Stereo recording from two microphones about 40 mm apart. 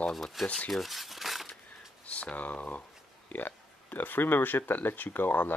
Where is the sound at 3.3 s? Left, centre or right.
Left.